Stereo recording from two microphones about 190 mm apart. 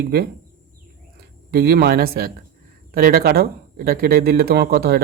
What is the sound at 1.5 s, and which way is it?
Speech, 55° right (ahead or behind).